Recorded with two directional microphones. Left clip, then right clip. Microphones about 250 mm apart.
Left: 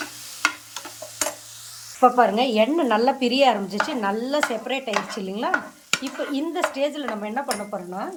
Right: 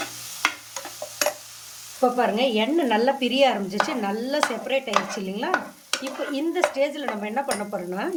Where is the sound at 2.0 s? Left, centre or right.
Centre.